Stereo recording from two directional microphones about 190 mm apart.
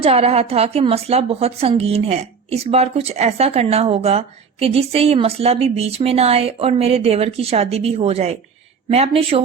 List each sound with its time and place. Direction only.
0.0 s a woman's voice: 35° right (ahead or behind)